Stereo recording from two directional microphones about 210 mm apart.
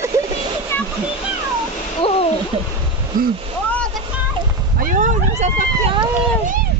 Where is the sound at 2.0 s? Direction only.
25° left (ahead or behind).